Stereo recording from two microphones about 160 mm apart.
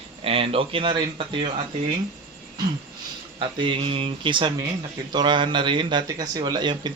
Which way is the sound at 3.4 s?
30° right (ahead or behind).